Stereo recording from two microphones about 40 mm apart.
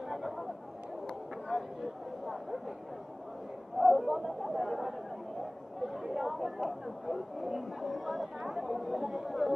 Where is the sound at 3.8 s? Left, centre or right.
Centre.